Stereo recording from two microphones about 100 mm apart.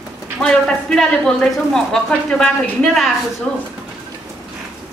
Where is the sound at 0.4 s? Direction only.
5° left (ahead or behind).